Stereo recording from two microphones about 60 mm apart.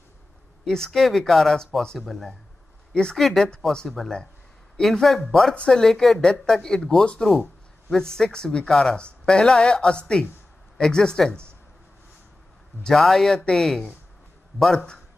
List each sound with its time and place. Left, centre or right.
0.7 s speech: centre
2.9 s speech: centre
3.2 s speech: centre
12.8 s speech: centre